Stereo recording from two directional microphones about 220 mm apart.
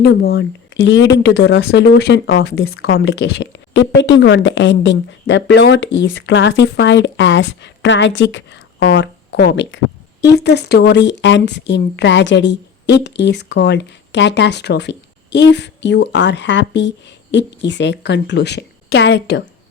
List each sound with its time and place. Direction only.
0.0 s a woman's voice: 45° left (ahead or behind)